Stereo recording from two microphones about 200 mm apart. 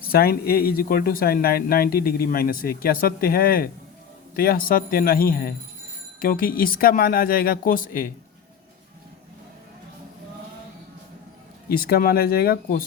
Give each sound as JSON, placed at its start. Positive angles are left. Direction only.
{"t": 0.1, "sound": "speech", "side_deg": 50}
{"t": 11.7, "sound": "speech", "side_deg": 50}